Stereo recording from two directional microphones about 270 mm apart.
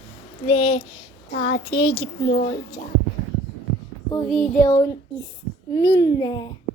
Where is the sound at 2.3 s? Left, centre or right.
Left.